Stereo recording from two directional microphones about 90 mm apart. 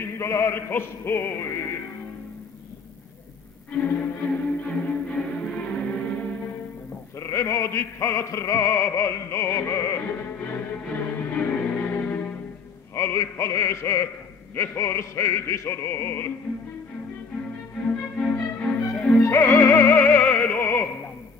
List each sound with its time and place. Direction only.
0.0 s speech: 30° left (ahead or behind)
3.7 s music: 20° left (ahead or behind)
7.2 s music: 30° left (ahead or behind)
12.9 s speech: 30° left (ahead or behind)
17.8 s music: 15° left (ahead or behind)
19.1 s music: 25° left (ahead or behind)